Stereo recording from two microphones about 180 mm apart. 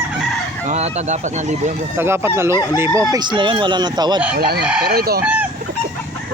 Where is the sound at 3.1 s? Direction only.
25° right (ahead or behind).